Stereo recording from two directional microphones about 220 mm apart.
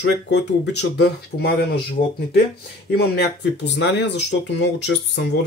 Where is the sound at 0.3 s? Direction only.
50° left (ahead or behind).